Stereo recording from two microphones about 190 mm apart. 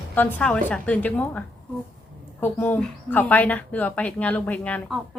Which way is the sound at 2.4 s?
10° left (ahead or behind).